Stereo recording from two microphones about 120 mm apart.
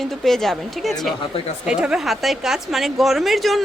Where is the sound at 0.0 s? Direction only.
Centre (ahead or behind).